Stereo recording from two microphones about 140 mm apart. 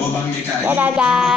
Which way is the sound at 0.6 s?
10° right (ahead or behind).